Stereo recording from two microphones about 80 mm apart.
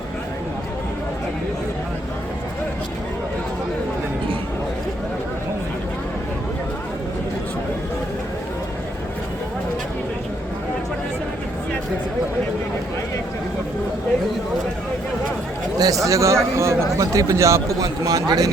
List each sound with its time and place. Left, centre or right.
15.8 s a man's voice: right
17.8 s a man's voice: right